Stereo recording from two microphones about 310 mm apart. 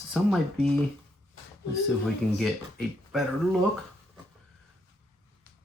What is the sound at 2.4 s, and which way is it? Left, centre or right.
Speech, centre.